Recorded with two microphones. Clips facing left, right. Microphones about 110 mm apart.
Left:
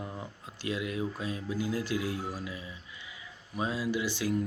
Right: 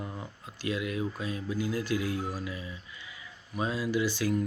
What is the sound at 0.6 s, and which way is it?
Speech, 25° left (ahead or behind).